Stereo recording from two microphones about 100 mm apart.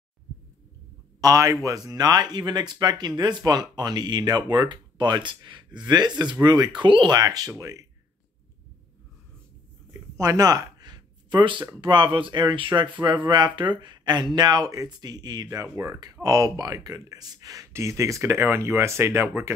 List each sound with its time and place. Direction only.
1.2 s speech: 35° right (ahead or behind)
9.8 s speech: 35° right (ahead or behind)